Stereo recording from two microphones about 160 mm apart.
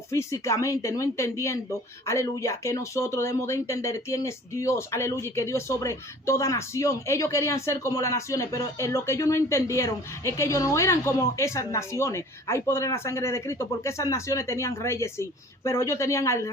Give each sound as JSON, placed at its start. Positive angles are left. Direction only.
{"t": 0.1, "sound": "a woman's voice", "side_deg": 20}